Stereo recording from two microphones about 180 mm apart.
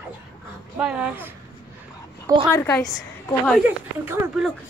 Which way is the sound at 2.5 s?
15° left (ahead or behind).